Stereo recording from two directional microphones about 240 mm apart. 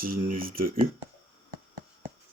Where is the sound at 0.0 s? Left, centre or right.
Right.